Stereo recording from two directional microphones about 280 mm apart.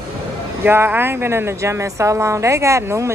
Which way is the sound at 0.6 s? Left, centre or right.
Centre.